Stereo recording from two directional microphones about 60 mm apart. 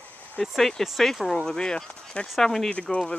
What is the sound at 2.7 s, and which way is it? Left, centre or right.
Speech, left.